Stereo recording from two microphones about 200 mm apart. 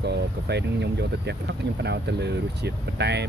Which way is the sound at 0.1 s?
55° right (ahead or behind).